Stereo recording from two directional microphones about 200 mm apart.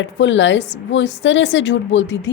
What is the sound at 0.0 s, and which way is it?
A woman's voice, 70° left (ahead or behind).